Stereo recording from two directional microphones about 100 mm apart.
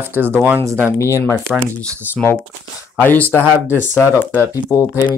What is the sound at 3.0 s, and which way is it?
Speech, 15° left (ahead or behind).